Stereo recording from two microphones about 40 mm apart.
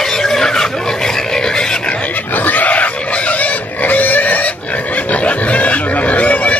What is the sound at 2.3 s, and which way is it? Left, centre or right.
Pig, left.